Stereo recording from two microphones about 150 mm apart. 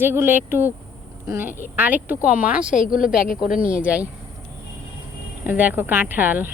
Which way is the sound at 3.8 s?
10° right (ahead or behind).